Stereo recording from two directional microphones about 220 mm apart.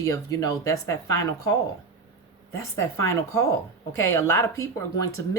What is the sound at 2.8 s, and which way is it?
Speech, 15° left (ahead or behind).